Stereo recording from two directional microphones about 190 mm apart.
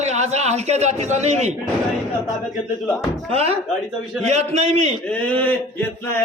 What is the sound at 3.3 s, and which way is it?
A man's voice, 35° right (ahead or behind).